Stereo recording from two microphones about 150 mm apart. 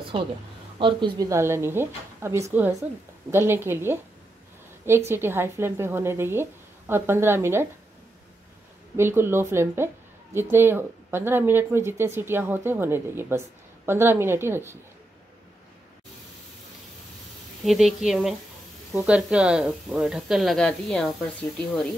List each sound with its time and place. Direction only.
0.1 s speech: 35° right (ahead or behind)
1.3 s speech: 15° right (ahead or behind)
8.9 s speech: 15° right (ahead or behind)
17.6 s speech: centre (ahead or behind)